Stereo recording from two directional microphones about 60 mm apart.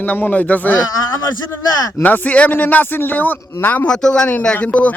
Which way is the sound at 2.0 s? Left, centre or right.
Left.